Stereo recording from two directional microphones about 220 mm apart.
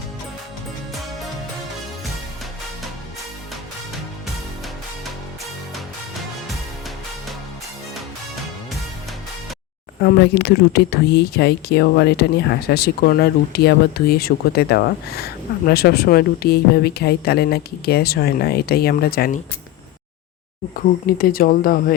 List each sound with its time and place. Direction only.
10.0 s speech: 45° left (ahead or behind)
20.7 s speech: 40° left (ahead or behind)